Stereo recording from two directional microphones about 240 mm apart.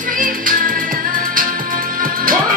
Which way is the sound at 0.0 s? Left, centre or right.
Right.